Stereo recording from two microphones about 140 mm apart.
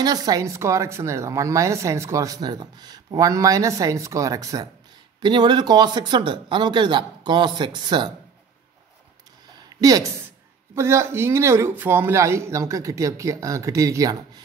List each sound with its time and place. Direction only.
0.0 s speech: 25° right (ahead or behind)
9.8 s speech: 25° right (ahead or behind)